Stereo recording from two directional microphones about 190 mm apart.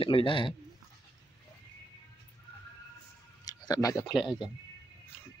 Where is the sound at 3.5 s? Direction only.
20° left (ahead or behind).